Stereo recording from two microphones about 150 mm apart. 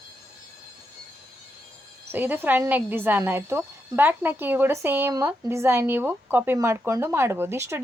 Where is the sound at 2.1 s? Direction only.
15° right (ahead or behind).